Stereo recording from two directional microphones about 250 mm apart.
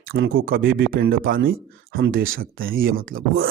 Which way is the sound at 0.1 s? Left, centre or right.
Right.